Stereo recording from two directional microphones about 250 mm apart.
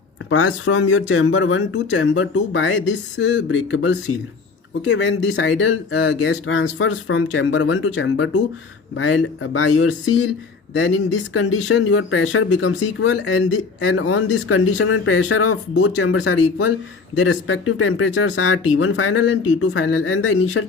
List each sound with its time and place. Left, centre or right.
0.3 s speech: left